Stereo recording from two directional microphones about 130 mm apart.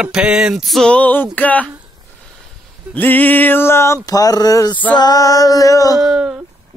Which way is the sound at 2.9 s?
15° left (ahead or behind).